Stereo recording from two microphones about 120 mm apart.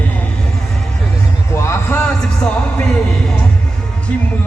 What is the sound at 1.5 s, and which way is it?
Heart sounds, 20° left (ahead or behind).